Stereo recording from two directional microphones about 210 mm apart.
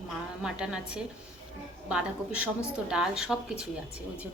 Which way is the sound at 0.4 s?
5° right (ahead or behind).